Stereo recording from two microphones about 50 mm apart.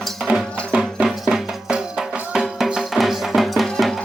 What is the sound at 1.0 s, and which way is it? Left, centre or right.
Music, centre.